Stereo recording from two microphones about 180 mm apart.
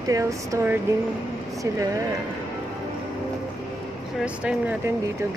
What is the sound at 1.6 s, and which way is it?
Speech, 15° right (ahead or behind).